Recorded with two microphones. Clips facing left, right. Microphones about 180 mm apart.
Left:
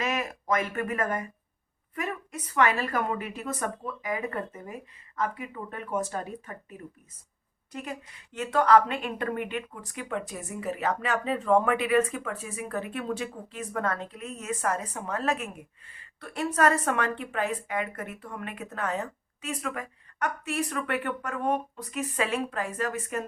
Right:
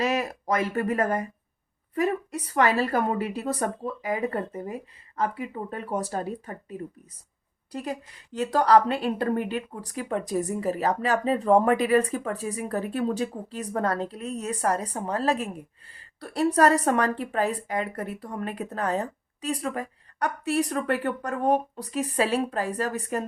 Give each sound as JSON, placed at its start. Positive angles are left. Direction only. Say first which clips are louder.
{"t": 0.0, "sound": "a woman's voice", "louder": "right 5 dB", "side_deg": -35}
{"t": 7.7, "sound": "a woman's voice", "louder": "right 5 dB", "side_deg": -35}